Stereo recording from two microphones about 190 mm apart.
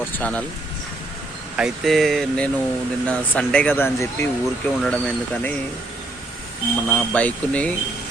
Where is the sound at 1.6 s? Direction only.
Centre (ahead or behind).